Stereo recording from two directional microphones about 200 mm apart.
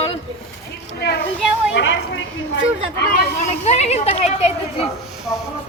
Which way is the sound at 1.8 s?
70° left (ahead or behind).